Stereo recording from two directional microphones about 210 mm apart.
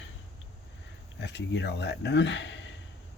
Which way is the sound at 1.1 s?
55° left (ahead or behind).